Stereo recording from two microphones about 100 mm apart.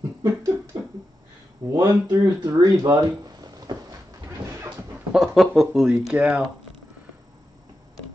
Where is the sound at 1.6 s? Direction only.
40° right (ahead or behind).